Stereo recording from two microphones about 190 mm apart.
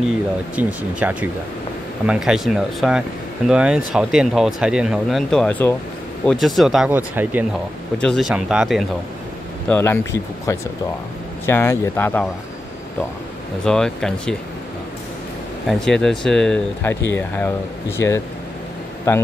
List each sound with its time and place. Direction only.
0.6 s speech: 10° right (ahead or behind)
9.7 s speech: 10° left (ahead or behind)
11.4 s speech: 15° left (ahead or behind)
13.7 s speech: 5° left (ahead or behind)
15.6 s speech: 5° left (ahead or behind)